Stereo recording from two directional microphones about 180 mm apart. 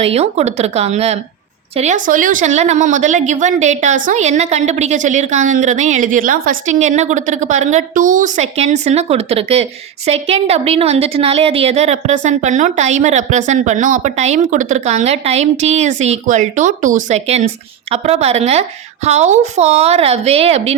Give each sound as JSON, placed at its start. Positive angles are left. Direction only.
{"t": 0.0, "sound": "a woman's voice", "side_deg": -35}